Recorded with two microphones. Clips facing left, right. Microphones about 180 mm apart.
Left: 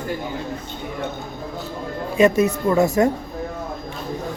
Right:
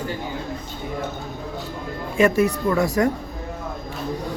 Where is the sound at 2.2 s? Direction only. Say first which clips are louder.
Left 2 dB; 20° left (ahead or behind).